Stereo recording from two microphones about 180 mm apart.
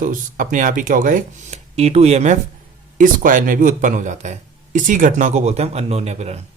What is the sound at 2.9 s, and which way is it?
Speech, 45° right (ahead or behind).